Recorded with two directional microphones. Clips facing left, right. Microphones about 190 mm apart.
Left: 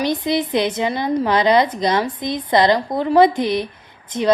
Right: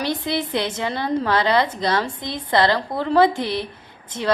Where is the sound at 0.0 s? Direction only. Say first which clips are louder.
Left 4 dB; 15° left (ahead or behind).